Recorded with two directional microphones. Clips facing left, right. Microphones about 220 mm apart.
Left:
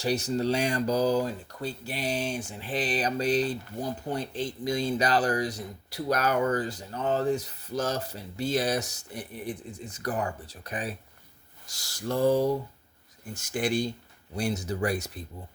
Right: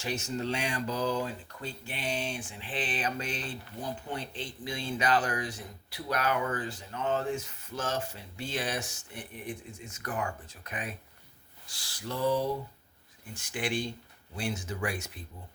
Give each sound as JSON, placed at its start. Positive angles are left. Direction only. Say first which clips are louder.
{"t": 0.0, "sound": "speech", "louder": "left 7 dB", "side_deg": 35}
{"t": 11.6, "sound": "a sound", "louder": "left 6 dB", "side_deg": 45}
{"t": 13.2, "sound": "speech", "louder": "left 5 dB", "side_deg": 40}